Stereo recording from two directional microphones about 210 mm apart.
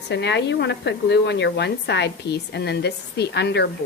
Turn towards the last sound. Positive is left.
turn(degrees=55)  # may be behind; listen again after turning